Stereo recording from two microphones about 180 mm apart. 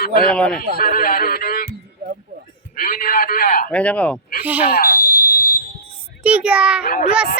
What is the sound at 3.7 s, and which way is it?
Speech, 5° left (ahead or behind).